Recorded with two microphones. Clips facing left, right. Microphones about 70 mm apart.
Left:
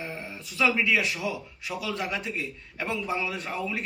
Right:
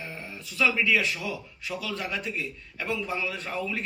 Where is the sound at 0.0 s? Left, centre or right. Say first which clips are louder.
Left 2 dB; left.